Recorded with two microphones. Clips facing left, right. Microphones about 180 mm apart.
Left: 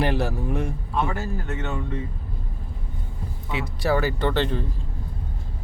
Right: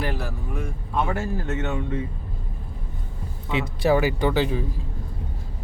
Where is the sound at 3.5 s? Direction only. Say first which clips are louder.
Right 3 dB; 20° right (ahead or behind).